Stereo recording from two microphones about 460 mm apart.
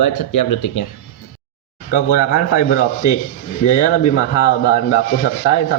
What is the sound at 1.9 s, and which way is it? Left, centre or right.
Speech, centre.